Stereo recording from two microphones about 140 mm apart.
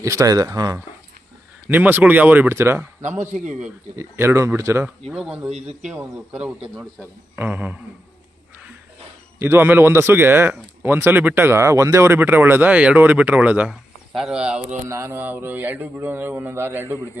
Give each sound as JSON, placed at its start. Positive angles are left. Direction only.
{"t": 0.0, "sound": "speech", "side_deg": -25}
{"t": 1.6, "sound": "a man's voice", "side_deg": -10}
{"t": 3.9, "sound": "speech", "side_deg": -20}
{"t": 5.0, "sound": "speech", "side_deg": -5}
{"t": 5.5, "sound": "speech", "side_deg": -50}
{"t": 5.9, "sound": "a man's voice", "side_deg": -10}
{"t": 9.4, "sound": "a man's voice", "side_deg": -15}
{"t": 14.8, "sound": "a man's voice", "side_deg": -20}